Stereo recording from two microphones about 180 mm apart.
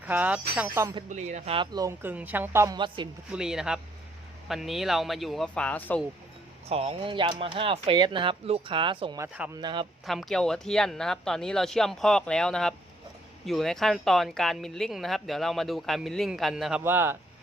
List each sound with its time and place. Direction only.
0.0 s speech: 10° right (ahead or behind)
1.1 s speech: 40° right (ahead or behind)
1.7 s speech: 15° right (ahead or behind)
2.7 s speech: 25° right (ahead or behind)
3.3 s speech: 5° right (ahead or behind)
6.7 s speech: 35° right (ahead or behind)
9.2 s speech: 5° right (ahead or behind)
9.6 s speech: 25° right (ahead or behind)
10.1 s speech: centre (ahead or behind)
16.8 s speech: 10° right (ahead or behind)